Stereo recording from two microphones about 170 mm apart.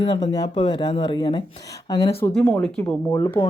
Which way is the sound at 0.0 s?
25° left (ahead or behind).